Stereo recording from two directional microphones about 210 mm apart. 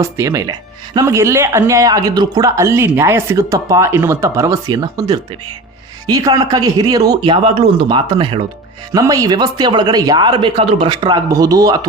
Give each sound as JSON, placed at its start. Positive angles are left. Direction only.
{"t": 0.0, "sound": "speech", "side_deg": -15}
{"t": 6.1, "sound": "speech", "side_deg": -15}